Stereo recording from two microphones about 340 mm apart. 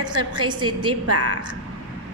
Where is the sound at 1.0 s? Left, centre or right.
Right.